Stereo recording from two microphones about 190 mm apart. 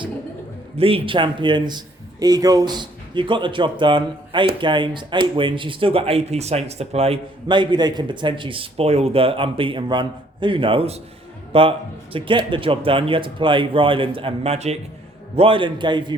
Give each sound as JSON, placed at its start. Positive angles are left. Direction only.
{"t": 0.8, "sound": "a man's voice", "side_deg": -30}